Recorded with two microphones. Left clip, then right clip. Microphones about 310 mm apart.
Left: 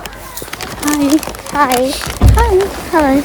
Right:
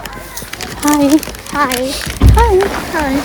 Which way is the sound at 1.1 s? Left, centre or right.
Left.